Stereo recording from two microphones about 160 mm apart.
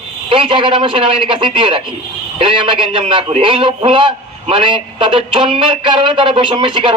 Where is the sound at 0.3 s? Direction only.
30° right (ahead or behind).